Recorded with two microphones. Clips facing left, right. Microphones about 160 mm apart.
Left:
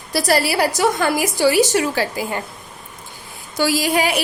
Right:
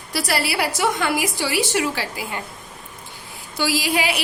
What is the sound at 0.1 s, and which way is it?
A woman's voice, 40° left (ahead or behind).